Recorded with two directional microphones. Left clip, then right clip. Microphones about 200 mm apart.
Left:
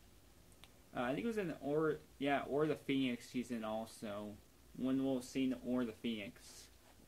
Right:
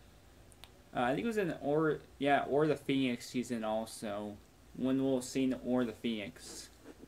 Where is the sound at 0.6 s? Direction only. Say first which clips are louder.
Right 7 dB; 5° left (ahead or behind).